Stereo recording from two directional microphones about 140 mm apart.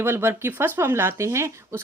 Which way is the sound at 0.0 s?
15° right (ahead or behind).